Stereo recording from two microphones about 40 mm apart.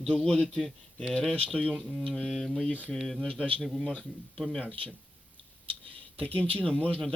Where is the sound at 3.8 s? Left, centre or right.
Left.